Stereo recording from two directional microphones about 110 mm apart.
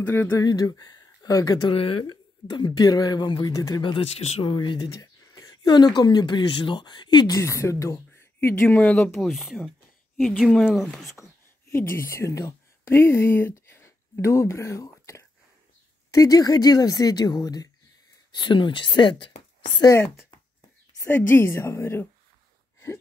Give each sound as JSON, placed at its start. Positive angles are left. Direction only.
{"t": 0.0, "sound": "a woman's voice", "side_deg": 20}
{"t": 0.4, "sound": "speech", "side_deg": 35}
{"t": 1.7, "sound": "speech", "side_deg": 55}
{"t": 2.0, "sound": "speech", "side_deg": 40}
{"t": 3.8, "sound": "speech", "side_deg": 50}
{"t": 9.2, "sound": "speech", "side_deg": 0}
{"t": 11.7, "sound": "speech", "side_deg": 20}
{"t": 21.0, "sound": "a woman's voice", "side_deg": 20}